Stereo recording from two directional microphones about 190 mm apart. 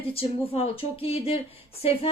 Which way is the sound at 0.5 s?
30° left (ahead or behind).